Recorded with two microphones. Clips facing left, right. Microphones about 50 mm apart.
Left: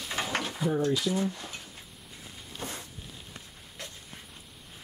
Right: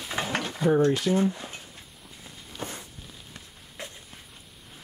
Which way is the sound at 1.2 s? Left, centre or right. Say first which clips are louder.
Right 5 dB; centre.